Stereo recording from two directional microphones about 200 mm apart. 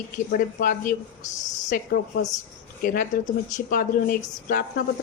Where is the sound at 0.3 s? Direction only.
45° left (ahead or behind).